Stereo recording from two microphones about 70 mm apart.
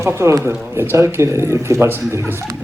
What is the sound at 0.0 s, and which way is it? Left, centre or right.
A woman's voice, right.